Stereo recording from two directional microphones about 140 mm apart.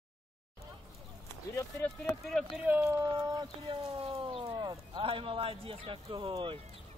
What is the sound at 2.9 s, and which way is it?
Speech, 25° right (ahead or behind).